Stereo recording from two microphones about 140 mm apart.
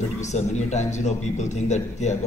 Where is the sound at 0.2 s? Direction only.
55° left (ahead or behind).